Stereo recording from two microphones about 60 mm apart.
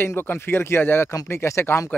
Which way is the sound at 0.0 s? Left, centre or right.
Left.